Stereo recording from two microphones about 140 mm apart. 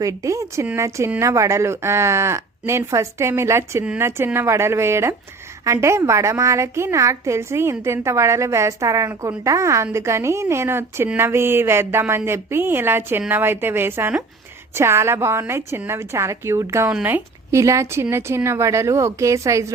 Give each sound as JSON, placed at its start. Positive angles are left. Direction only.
{"t": 0.0, "sound": "a woman's voice", "side_deg": -25}